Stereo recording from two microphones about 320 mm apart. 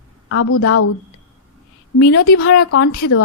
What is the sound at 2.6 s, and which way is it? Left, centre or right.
Speech, left.